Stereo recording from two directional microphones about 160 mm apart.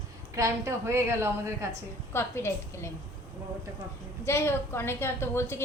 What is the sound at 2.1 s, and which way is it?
Speech, 15° left (ahead or behind).